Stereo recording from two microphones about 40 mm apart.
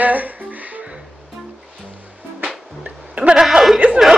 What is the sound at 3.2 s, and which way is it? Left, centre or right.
Hiccup, right.